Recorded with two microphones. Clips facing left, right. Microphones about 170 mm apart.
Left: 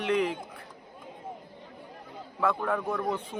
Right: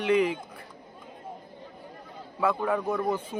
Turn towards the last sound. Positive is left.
turn(degrees=0)  # may be behind; listen again after turning